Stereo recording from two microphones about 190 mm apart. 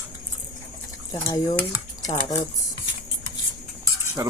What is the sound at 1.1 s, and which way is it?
Speech, 20° left (ahead or behind).